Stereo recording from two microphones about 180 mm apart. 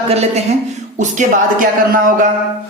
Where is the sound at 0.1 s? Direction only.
35° right (ahead or behind).